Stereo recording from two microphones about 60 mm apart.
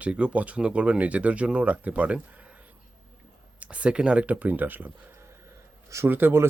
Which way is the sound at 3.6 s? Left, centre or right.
Right.